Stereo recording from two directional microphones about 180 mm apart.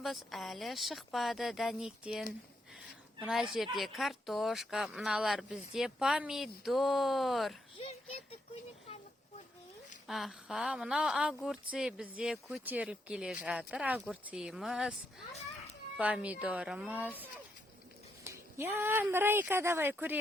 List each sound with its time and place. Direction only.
0.0 s speech: centre (ahead or behind)
7.8 s a sound: 35° left (ahead or behind)
10.1 s speech: centre (ahead or behind)
16.0 s speech: 5° right (ahead or behind)
18.2 s speech: 15° right (ahead or behind)